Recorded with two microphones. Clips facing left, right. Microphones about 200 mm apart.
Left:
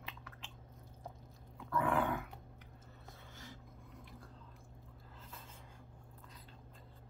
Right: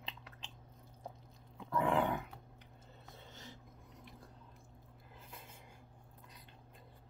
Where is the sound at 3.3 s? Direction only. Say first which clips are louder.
Left 1 dB; 20° right (ahead or behind).